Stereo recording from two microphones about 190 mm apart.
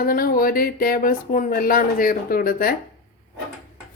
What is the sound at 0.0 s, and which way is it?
Speech, 50° left (ahead or behind).